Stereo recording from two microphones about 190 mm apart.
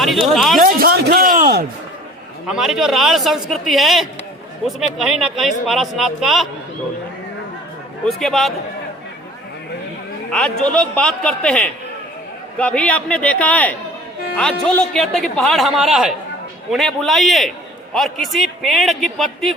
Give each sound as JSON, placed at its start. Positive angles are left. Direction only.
{"t": 0.3, "sound": "speech", "side_deg": 0}
{"t": 0.6, "sound": "a man's voice", "side_deg": -50}
{"t": 2.5, "sound": "speech", "side_deg": 0}
{"t": 8.0, "sound": "speech", "side_deg": 0}
{"t": 10.6, "sound": "a man's voice", "side_deg": 5}